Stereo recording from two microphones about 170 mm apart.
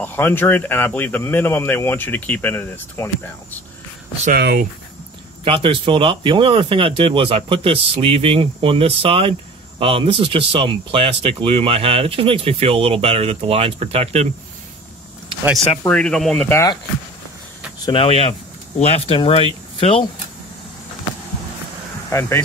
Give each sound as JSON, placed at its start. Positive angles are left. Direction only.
{"t": 0.0, "sound": "speech", "side_deg": 10}
{"t": 4.3, "sound": "speech", "side_deg": -70}
{"t": 5.4, "sound": "speech", "side_deg": -30}
{"t": 15.8, "sound": "speech", "side_deg": 5}
{"t": 17.8, "sound": "speech", "side_deg": 30}
{"t": 22.1, "sound": "speech", "side_deg": 15}